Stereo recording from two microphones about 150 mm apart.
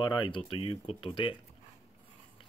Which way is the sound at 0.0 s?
30° left (ahead or behind).